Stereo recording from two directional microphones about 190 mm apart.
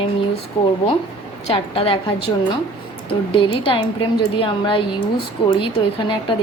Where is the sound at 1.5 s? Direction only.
30° left (ahead or behind).